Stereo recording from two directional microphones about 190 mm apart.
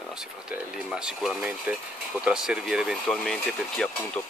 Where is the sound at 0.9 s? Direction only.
5° right (ahead or behind).